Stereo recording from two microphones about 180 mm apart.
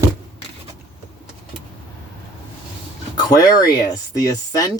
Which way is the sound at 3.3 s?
20° left (ahead or behind).